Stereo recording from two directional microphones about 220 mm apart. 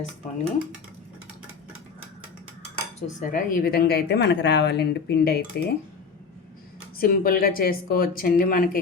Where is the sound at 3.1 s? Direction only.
35° left (ahead or behind).